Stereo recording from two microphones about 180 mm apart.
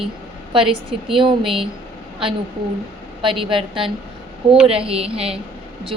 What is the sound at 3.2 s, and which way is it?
A woman's voice, 30° right (ahead or behind).